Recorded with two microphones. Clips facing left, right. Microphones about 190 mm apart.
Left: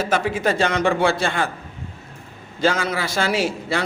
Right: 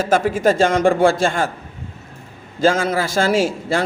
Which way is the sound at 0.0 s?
50° right (ahead or behind).